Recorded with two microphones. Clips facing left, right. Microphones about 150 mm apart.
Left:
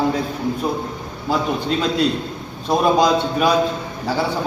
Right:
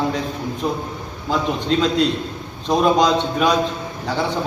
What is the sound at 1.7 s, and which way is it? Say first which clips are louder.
A man's voice: right 3 dB; 5° left (ahead or behind).